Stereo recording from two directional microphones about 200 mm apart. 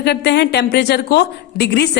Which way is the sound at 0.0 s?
55° left (ahead or behind).